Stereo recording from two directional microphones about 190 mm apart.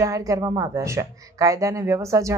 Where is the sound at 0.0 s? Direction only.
15° right (ahead or behind).